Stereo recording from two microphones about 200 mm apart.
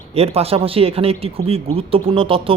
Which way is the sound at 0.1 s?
30° right (ahead or behind).